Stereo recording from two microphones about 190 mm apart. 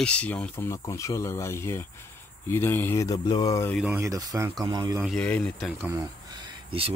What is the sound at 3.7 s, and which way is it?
Speech, 5° right (ahead or behind).